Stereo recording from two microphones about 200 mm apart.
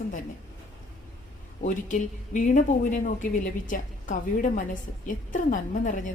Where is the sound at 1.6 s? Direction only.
40° left (ahead or behind).